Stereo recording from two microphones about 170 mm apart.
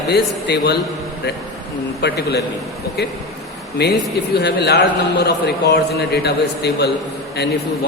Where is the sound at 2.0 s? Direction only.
70° left (ahead or behind).